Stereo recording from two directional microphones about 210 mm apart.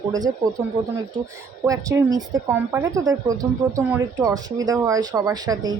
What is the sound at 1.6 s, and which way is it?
A woman's voice, 15° right (ahead or behind).